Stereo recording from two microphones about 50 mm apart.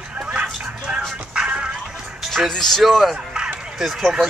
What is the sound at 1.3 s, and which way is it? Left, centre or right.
Music, centre.